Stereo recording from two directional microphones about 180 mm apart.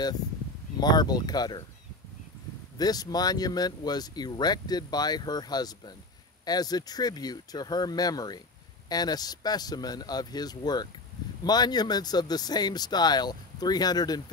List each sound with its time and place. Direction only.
0.7 s speech: 25° left (ahead or behind)
2.8 s speech: 20° left (ahead or behind)